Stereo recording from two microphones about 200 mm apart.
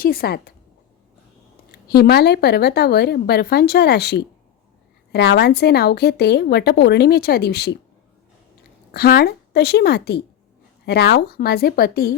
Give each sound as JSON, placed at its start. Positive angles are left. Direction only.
{"t": 0.0, "sound": "a woman's voice", "side_deg": 50}
{"t": 1.9, "sound": "a woman's voice", "side_deg": 55}
{"t": 8.9, "sound": "a woman's voice", "side_deg": 50}